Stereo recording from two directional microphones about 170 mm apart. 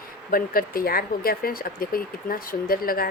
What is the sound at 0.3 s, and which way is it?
Speech, 60° left (ahead or behind).